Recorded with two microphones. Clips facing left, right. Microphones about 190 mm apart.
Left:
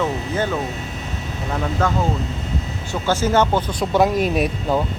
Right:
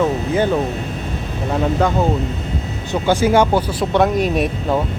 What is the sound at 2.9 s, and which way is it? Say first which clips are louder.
Speech: right 4 dB; 15° right (ahead or behind).